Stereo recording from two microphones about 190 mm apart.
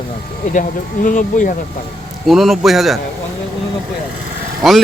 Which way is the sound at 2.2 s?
Centre (ahead or behind).